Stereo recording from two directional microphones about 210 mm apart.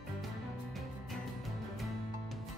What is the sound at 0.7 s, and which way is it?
Music, centre (ahead or behind).